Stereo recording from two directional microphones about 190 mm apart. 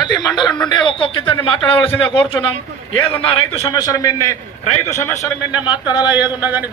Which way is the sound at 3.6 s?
20° left (ahead or behind).